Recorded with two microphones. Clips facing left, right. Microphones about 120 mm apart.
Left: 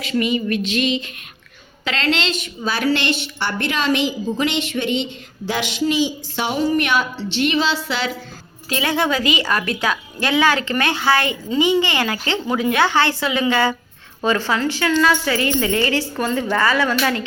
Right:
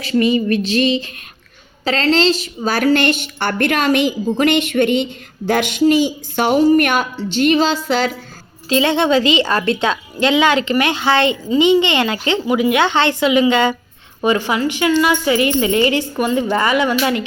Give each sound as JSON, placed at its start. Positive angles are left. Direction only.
{"t": 0.0, "sound": "a sound", "side_deg": -35}
{"t": 1.8, "sound": "a woman's voice", "side_deg": -35}
{"t": 8.7, "sound": "a woman's voice", "side_deg": -25}